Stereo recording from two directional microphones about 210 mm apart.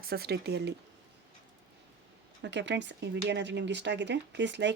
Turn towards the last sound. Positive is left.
turn(degrees=-55)  # may be behind; listen again after turning